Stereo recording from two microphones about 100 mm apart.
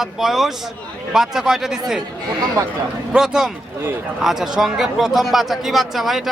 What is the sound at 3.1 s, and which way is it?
Speech, 5° right (ahead or behind).